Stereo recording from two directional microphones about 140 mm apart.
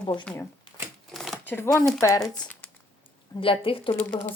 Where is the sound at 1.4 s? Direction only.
15° left (ahead or behind).